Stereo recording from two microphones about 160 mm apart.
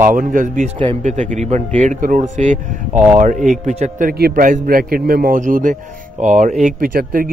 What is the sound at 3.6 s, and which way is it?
Speech, 50° right (ahead or behind).